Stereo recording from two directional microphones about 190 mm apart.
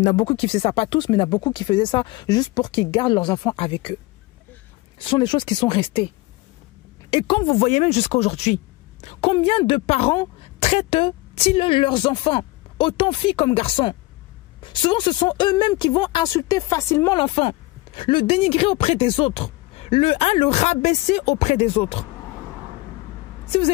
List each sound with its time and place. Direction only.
0.0 s a woman's voice: 30° left (ahead or behind)
5.1 s a woman's voice: 25° left (ahead or behind)
7.1 s a woman's voice: 25° left (ahead or behind)
17.2 s a woman's voice: 30° left (ahead or behind)